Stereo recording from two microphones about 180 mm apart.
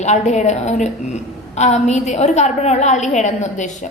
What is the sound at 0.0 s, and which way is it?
A woman's voice, 40° left (ahead or behind).